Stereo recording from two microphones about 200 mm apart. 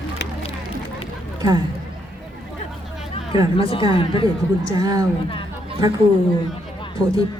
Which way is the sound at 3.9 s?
25° left (ahead or behind).